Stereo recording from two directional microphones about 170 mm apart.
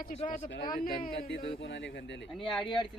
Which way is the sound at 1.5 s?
80° left.